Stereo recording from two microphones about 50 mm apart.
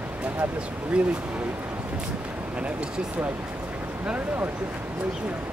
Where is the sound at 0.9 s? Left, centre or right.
Centre.